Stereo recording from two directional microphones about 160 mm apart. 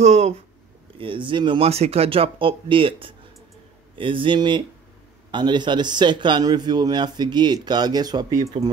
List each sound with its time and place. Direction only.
0.0 s speech: 45° right (ahead or behind)
0.9 s speech: 30° right (ahead or behind)